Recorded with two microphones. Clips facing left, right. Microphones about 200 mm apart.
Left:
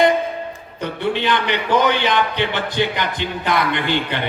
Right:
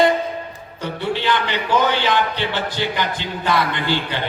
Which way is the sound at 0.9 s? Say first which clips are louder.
Left 1 dB; 20° left (ahead or behind).